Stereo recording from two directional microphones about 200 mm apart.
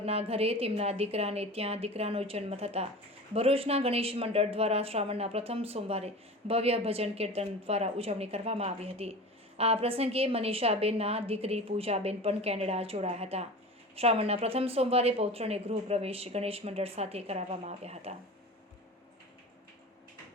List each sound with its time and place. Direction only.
0.0 s a woman's voice: 30° right (ahead or behind)